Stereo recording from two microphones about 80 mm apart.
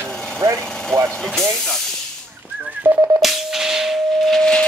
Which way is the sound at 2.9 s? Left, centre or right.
Right.